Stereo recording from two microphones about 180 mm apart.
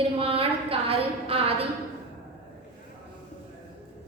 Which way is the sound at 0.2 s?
30° right (ahead or behind).